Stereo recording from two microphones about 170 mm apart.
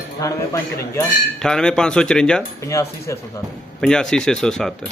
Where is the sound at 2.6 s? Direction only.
15° left (ahead or behind).